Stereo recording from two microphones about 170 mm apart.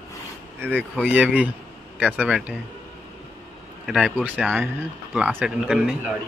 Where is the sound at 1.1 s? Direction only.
10° right (ahead or behind).